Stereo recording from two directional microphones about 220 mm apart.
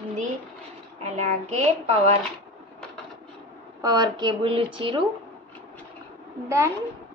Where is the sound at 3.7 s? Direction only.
20° right (ahead or behind).